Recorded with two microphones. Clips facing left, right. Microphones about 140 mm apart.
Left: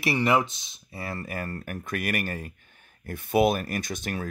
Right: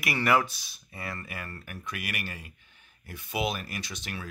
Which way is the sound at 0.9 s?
35° left (ahead or behind).